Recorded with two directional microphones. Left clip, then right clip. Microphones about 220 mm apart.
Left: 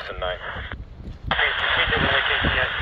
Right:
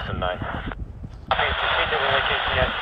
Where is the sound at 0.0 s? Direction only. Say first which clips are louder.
Right 1 dB; 25° right (ahead or behind).